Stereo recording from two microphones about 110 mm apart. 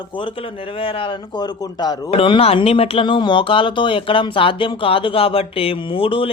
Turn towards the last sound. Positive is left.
turn(degrees=55)  # may be behind; listen again after turning